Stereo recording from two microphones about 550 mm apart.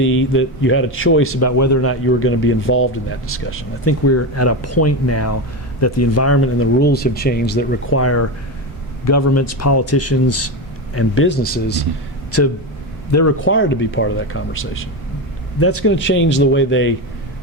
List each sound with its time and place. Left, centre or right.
0.0 s speech: left
13.1 s speech: left